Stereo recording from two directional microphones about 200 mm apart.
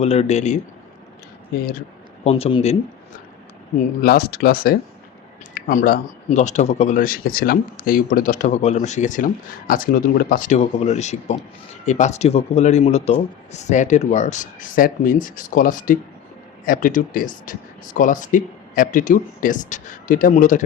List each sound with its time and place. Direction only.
0.0 s speech: 30° left (ahead or behind)
2.2 s speech: 30° left (ahead or behind)
4.0 s speech: 45° left (ahead or behind)